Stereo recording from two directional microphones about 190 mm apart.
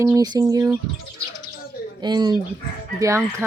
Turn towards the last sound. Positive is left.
turn(degrees=-15)  # may be behind; listen again after turning